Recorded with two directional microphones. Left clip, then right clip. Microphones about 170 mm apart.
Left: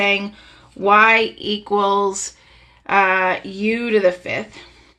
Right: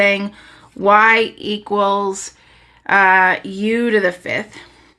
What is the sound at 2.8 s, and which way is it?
Speech, 35° right (ahead or behind).